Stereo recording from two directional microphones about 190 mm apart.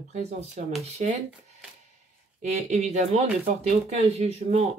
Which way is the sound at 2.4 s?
35° right (ahead or behind).